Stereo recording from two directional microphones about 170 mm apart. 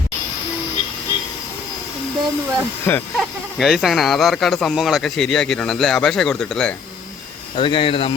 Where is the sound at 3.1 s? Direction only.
5° right (ahead or behind).